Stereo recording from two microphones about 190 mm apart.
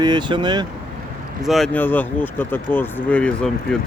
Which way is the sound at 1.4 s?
Centre (ahead or behind).